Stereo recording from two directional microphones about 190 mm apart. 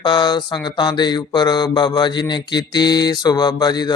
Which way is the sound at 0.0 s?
25° left (ahead or behind).